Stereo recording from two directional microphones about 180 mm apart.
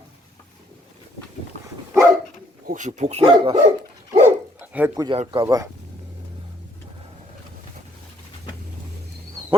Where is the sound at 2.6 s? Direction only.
45° right (ahead or behind).